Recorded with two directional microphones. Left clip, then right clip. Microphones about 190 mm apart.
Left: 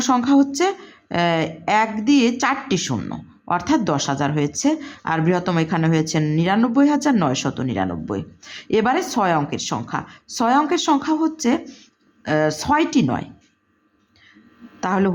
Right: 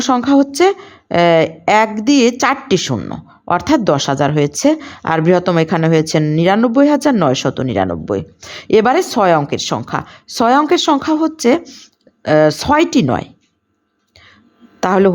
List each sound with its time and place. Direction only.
0.0 s a woman's voice: 35° right (ahead or behind)
14.8 s a woman's voice: 45° right (ahead or behind)